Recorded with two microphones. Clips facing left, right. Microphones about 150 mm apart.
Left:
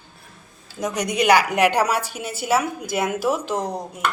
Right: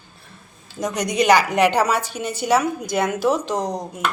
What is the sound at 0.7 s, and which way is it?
A woman's voice, 5° left (ahead or behind).